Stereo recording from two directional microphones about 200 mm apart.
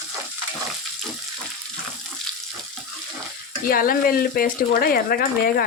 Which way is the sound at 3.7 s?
45° left (ahead or behind).